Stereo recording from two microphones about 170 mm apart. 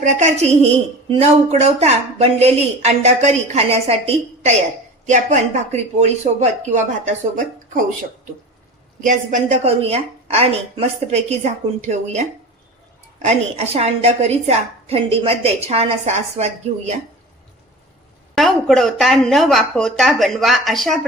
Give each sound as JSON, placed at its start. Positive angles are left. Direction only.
{"t": 0.0, "sound": "a woman's voice", "side_deg": -45}
{"t": 9.0, "sound": "a woman's voice", "side_deg": -45}
{"t": 18.3, "sound": "speech", "side_deg": 0}